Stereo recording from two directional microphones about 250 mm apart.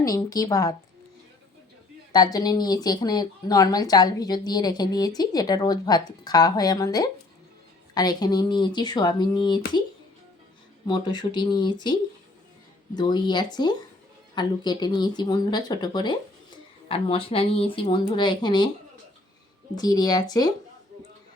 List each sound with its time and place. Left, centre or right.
0.0 s speech: centre
2.1 s speech: centre
10.8 s speech: centre
12.9 s speech: centre
19.7 s speech: centre